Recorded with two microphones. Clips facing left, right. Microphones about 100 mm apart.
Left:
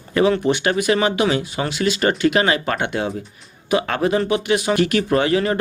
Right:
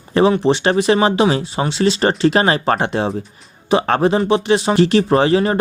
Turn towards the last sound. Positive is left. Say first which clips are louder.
# right 4 dB
turn(degrees=-30)  # may be behind; listen again after turning